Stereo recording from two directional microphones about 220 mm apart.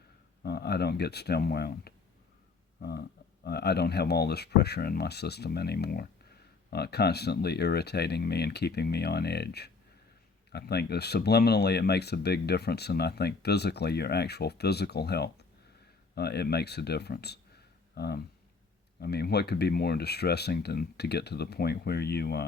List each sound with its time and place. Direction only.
0.4 s speech: 45° left (ahead or behind)